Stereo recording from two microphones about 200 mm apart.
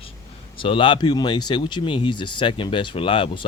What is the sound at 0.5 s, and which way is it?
Speech, 25° left (ahead or behind).